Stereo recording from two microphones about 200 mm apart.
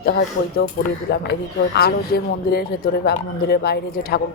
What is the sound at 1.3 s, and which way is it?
Speech, 55° left (ahead or behind).